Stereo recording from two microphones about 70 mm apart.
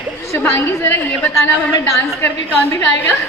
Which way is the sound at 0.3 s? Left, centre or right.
Left.